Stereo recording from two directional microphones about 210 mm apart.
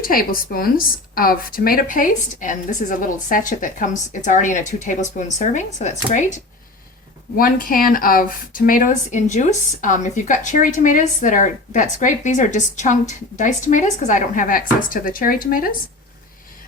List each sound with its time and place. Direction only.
0.0 s speech: 45° left (ahead or behind)